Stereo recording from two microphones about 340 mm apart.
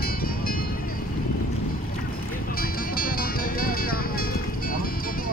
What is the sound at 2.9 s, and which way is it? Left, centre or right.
Music, left.